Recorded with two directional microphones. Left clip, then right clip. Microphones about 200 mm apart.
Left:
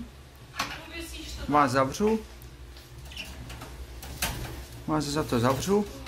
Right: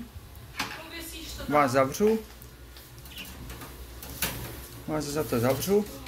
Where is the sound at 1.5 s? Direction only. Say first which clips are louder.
Even; 5° left (ahead or behind).